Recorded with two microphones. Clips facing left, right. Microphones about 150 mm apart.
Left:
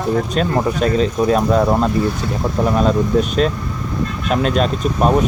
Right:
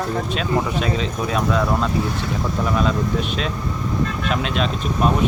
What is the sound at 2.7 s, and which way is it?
Speech, 40° left (ahead or behind).